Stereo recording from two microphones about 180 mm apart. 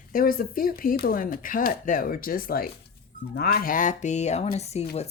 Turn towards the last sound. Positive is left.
turn(degrees=35)  # may be behind; listen again after turning